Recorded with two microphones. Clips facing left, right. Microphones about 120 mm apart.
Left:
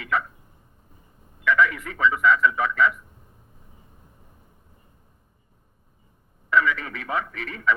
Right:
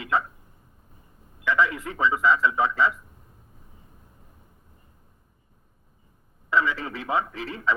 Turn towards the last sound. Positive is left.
turn(degrees=-30)  # may be behind; listen again after turning